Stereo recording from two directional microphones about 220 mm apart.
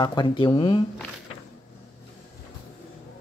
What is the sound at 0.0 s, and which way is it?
Speech, 20° left (ahead or behind).